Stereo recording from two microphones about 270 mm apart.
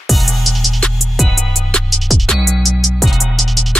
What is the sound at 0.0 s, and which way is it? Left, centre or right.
Music, centre.